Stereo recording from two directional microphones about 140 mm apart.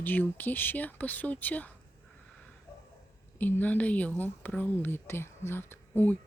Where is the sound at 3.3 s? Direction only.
10° left (ahead or behind).